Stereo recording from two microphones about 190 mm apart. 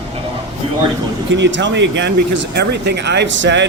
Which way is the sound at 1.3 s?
70° right (ahead or behind).